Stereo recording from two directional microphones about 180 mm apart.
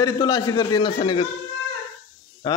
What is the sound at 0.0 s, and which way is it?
A man's voice, 20° left (ahead or behind).